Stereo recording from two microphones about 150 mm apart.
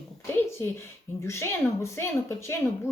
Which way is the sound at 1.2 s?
20° left (ahead or behind).